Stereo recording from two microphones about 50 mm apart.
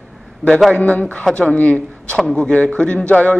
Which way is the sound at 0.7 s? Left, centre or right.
Left.